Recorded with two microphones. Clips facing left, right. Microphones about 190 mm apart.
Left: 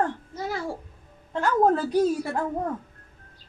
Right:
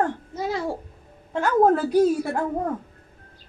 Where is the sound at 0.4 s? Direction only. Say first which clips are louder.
Right 4 dB; 20° right (ahead or behind).